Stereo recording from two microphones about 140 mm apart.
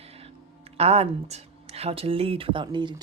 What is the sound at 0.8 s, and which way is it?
Speech, 45° right (ahead or behind).